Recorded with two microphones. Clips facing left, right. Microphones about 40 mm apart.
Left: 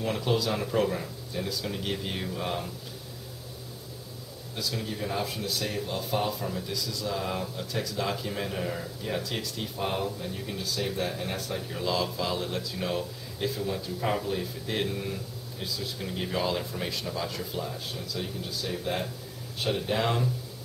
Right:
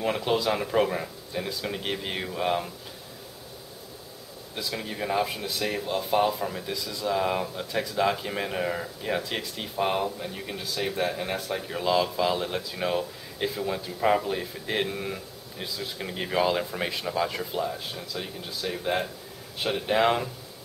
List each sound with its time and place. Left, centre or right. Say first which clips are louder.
0.0 s speech: right 3 dB; right
4.6 s speech: right 1 dB; right